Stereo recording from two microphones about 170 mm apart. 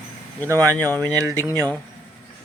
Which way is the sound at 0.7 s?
10° left (ahead or behind).